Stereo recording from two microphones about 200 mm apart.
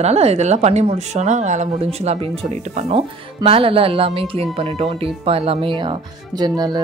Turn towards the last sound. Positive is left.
turn(degrees=-20)  # may be behind; listen again after turning